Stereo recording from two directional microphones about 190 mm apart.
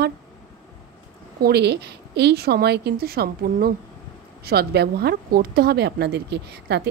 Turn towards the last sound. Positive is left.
turn(degrees=-60)  # may be behind; listen again after turning